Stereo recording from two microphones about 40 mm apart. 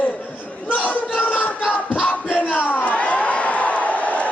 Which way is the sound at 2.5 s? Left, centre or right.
Left.